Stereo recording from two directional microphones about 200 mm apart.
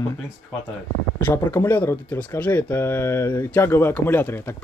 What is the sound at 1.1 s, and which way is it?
Speech, 10° left (ahead or behind).